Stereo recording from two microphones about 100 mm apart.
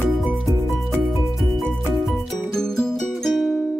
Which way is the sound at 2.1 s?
5° left (ahead or behind).